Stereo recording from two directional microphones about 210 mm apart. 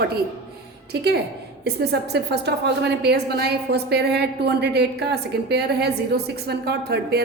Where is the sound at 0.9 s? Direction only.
50° right (ahead or behind).